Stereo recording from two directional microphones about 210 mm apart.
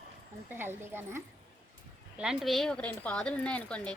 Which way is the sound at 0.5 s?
10° right (ahead or behind).